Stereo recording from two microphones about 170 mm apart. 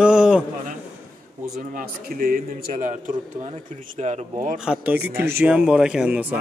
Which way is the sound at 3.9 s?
45° right (ahead or behind).